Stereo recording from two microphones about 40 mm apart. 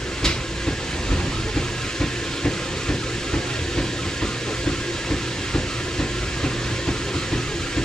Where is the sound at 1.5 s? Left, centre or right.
Centre.